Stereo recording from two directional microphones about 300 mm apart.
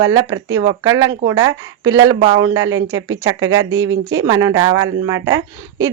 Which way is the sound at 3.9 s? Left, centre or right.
Right.